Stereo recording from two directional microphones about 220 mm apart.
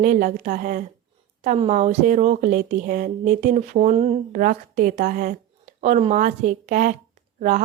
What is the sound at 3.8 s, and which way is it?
Speech, 25° right (ahead or behind).